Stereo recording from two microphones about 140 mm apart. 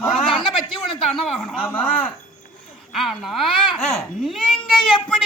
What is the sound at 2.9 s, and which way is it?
Speech, centre (ahead or behind).